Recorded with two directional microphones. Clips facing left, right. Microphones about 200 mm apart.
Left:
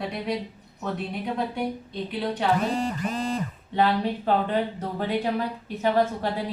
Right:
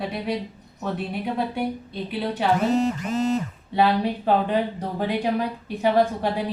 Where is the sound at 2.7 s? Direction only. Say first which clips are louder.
Right 5 dB; 25° right (ahead or behind).